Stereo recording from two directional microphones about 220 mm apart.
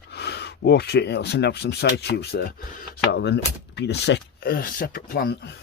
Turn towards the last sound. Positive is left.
turn(degrees=45)  # may be behind; listen again after turning